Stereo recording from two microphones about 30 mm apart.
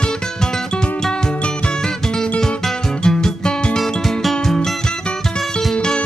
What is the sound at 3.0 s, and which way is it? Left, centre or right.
Music, left.